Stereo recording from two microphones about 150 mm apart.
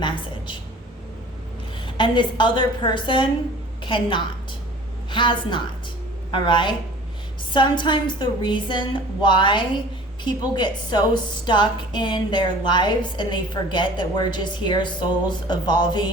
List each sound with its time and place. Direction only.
2.0 s a woman's voice: 30° left (ahead or behind)